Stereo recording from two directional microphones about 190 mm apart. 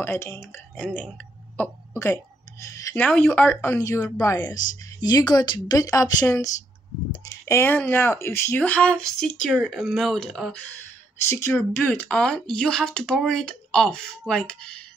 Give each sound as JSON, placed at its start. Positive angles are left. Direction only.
{"t": 0.0, "sound": "a woman's voice", "side_deg": 10}
{"t": 11.2, "sound": "speech", "side_deg": 15}